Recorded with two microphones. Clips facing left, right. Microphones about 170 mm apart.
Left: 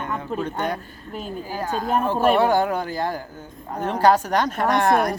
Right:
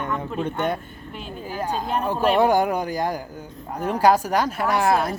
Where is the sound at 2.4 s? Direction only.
15° right (ahead or behind).